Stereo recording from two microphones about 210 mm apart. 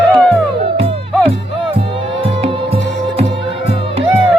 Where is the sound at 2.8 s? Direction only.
60° left (ahead or behind).